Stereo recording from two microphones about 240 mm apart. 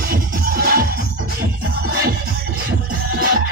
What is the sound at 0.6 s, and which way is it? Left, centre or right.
Music, right.